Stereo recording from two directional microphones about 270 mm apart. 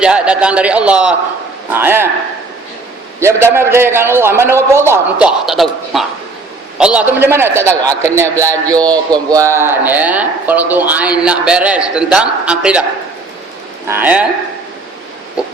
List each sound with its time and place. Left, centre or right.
0.0 s a man's voice: centre
3.2 s a man's voice: centre
6.7 s a man's voice: centre
8.7 s a man's voice: centre
9.1 s a man's voice: centre
13.8 s a man's voice: centre